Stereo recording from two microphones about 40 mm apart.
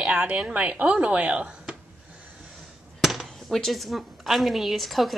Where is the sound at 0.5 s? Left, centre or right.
Right.